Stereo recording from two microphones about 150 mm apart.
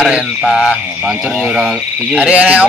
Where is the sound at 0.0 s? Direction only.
Centre (ahead or behind).